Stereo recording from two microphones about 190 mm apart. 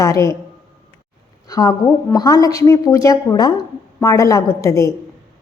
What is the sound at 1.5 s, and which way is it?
A woman's voice, 20° left (ahead or behind).